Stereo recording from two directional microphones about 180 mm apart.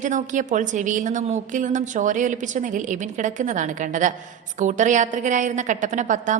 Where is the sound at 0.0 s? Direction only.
45° right (ahead or behind).